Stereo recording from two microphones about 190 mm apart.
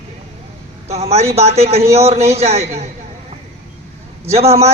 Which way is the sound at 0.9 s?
35° right (ahead or behind).